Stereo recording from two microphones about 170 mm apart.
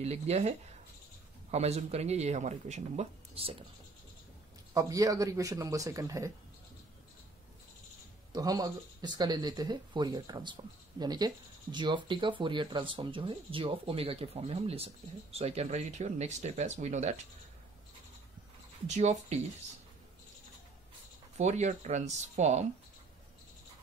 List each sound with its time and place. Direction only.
0.0 s speech: 40° right (ahead or behind)
4.7 s speech: 20° right (ahead or behind)
8.3 s speech: 20° right (ahead or behind); by 17.1 s 40° right (ahead or behind)
18.9 s speech: 40° right (ahead or behind)
21.4 s speech: 45° right (ahead or behind)